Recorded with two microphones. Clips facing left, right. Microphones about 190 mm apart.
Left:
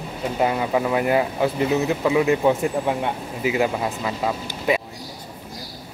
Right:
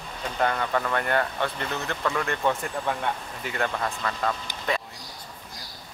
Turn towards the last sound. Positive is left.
turn(degrees=10)  # may be behind; listen again after turning